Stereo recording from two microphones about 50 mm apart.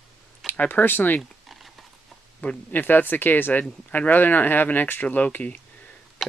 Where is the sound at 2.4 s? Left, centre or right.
Left.